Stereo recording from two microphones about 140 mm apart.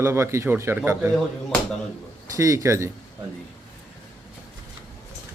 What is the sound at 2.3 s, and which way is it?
Speech, 25° right (ahead or behind).